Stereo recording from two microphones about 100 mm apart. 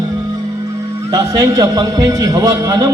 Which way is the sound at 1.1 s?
35° right (ahead or behind).